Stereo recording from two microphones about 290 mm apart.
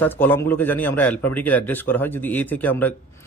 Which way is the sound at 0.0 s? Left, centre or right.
Centre.